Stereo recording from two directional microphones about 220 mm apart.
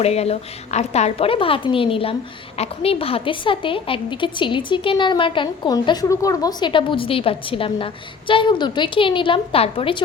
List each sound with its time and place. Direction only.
0.0 s a woman's voice: 30° left (ahead or behind)